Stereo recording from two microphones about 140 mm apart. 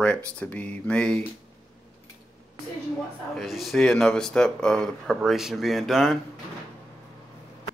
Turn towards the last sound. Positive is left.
turn(degrees=0)  # may be behind; listen again after turning